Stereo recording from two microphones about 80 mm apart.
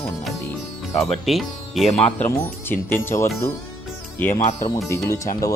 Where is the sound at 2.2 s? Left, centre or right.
Left.